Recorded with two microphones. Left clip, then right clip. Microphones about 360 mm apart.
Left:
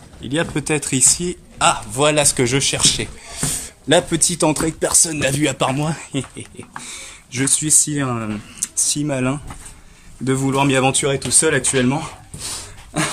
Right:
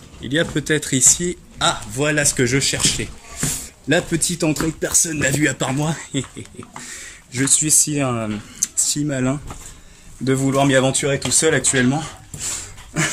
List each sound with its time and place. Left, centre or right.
0.2 s speech: centre